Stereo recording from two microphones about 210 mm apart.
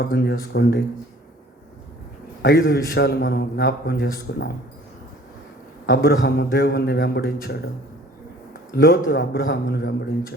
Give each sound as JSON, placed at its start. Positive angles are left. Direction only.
{"t": 0.0, "sound": "a man's voice", "side_deg": 50}
{"t": 2.4, "sound": "a man's voice", "side_deg": 50}
{"t": 5.8, "sound": "a man's voice", "side_deg": 50}
{"t": 8.7, "sound": "a man's voice", "side_deg": 50}